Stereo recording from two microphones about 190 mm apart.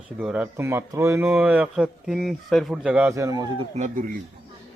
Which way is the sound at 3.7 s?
40° right (ahead or behind).